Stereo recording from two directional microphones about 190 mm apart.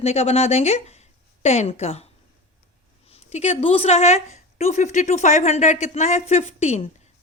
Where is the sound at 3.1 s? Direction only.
35° left (ahead or behind).